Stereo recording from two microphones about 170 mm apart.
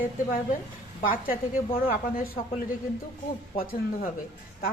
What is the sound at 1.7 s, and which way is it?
Speech, 35° left (ahead or behind).